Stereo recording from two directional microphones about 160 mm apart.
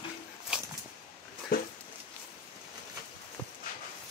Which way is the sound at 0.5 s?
5° right (ahead or behind).